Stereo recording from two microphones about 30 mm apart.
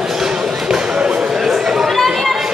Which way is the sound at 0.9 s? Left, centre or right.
Right.